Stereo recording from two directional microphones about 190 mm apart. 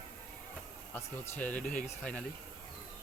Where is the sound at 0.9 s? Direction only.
5° left (ahead or behind).